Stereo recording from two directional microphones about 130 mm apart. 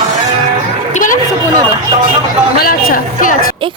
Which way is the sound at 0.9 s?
90° left.